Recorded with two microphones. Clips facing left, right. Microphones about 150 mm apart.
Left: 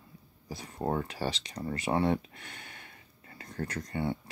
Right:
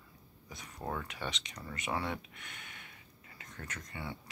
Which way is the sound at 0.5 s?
35° left (ahead or behind).